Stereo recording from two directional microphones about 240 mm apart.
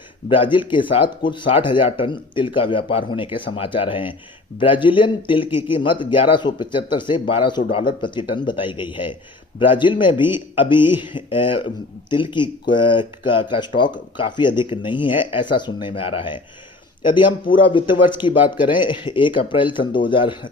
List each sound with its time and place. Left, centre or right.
0.3 s speech: left
17.6 s speech: left